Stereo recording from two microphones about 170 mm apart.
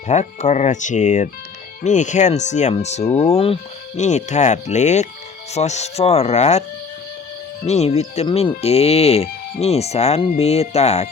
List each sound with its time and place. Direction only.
0.1 s speech: 45° left (ahead or behind)
7.7 s speech: 40° left (ahead or behind)